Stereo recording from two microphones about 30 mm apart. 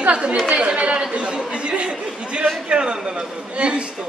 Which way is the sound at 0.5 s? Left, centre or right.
Right.